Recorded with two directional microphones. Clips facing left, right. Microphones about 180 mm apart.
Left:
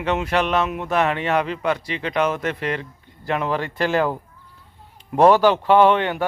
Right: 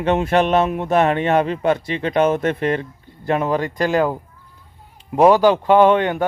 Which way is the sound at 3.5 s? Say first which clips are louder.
Right 3 dB; 15° right (ahead or behind).